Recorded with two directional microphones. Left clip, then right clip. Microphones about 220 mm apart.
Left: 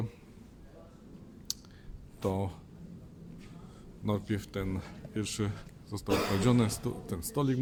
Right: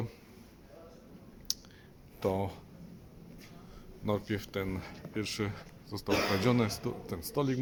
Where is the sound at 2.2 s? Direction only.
Centre (ahead or behind).